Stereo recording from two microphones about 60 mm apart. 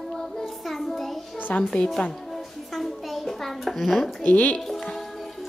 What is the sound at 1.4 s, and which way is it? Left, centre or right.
Music, left.